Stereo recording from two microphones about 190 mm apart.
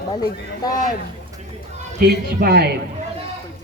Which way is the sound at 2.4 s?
55° right (ahead or behind).